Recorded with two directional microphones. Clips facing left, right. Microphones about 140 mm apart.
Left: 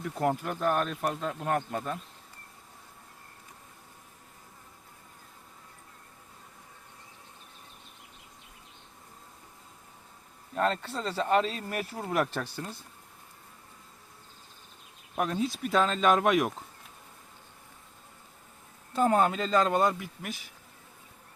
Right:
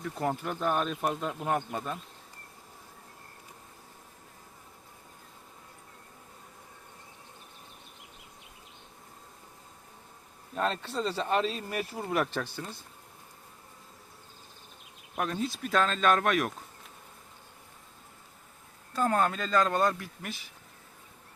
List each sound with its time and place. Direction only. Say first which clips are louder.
0.0 s speech: left 3 dB; 5° left (ahead or behind)
10.5 s speech: left 2 dB; centre (ahead or behind)
15.2 s speech: left 2 dB; 5° left (ahead or behind)
18.9 s speech: left 3 dB; 15° left (ahead or behind)